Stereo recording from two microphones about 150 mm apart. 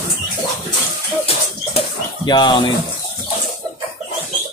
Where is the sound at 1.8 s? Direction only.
30° left (ahead or behind).